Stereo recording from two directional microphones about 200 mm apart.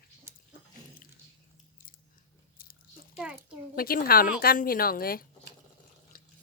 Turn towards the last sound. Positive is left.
turn(degrees=45)  # may be behind; listen again after turning